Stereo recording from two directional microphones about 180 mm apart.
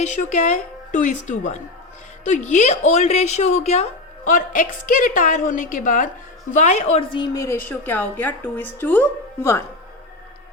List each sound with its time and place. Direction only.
0.0 s speech: 40° left (ahead or behind); by 7.5 s 20° left (ahead or behind)
7.7 s a woman's voice: 10° left (ahead or behind)